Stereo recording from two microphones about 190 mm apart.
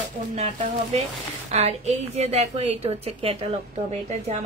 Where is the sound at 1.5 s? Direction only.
35° right (ahead or behind).